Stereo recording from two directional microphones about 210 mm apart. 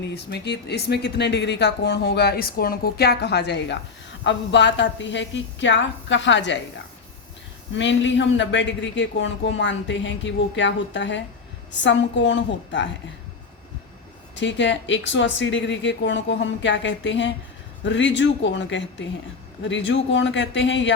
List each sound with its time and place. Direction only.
0.1 s speech: 50° left (ahead or behind)
7.8 s speech: 60° left (ahead or behind)
14.3 s speech: 60° left (ahead or behind)